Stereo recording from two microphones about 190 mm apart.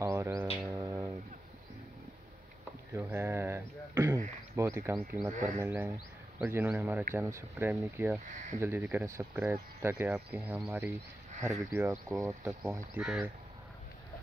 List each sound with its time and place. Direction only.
0.0 s bird: 15° right (ahead or behind)
0.7 s a sound: 15° right (ahead or behind)
2.9 s a sound: 10° right (ahead or behind)
4.6 s speech: 15° right (ahead or behind)
5.3 s speech: 40° right (ahead or behind)
5.6 s speech: 10° right (ahead or behind)